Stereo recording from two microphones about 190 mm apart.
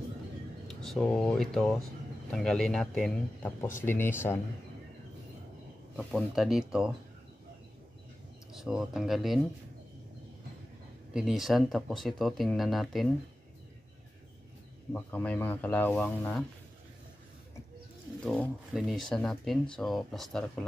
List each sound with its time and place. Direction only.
0.7 s speech: centre (ahead or behind)
5.9 s speech: centre (ahead or behind)
8.5 s speech: 5° right (ahead or behind)
11.1 s speech: centre (ahead or behind)
14.9 s speech: 10° left (ahead or behind)
18.2 s speech: 5° left (ahead or behind)